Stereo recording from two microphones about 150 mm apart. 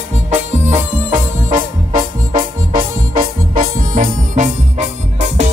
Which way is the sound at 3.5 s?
65° right (ahead or behind).